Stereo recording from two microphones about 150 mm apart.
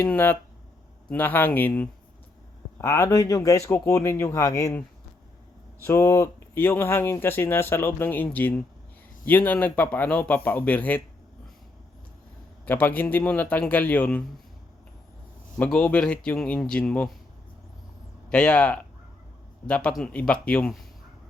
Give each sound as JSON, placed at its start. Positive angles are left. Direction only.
{"t": 0.0, "sound": "speech", "side_deg": 15}
{"t": 5.8, "sound": "speech", "side_deg": 20}
{"t": 12.6, "sound": "speech", "side_deg": 10}
{"t": 15.5, "sound": "speech", "side_deg": 10}
{"t": 18.3, "sound": "speech", "side_deg": 5}